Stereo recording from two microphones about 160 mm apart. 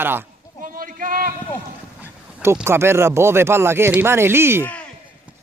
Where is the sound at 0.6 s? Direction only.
60° right (ahead or behind).